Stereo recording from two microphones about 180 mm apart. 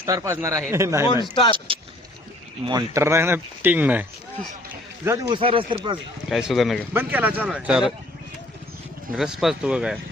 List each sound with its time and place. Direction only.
0.0 s speech: 15° right (ahead or behind)
1.0 s speech: 25° left (ahead or behind)
1.5 s speech: 30° right (ahead or behind); by 4.0 s 10° right (ahead or behind)
5.0 s speech: 20° right (ahead or behind)
5.4 s speech: 30° right (ahead or behind)
6.2 s speech: centre (ahead or behind)
6.9 s speech: 10° right (ahead or behind)
9.1 s speech: 5° right (ahead or behind)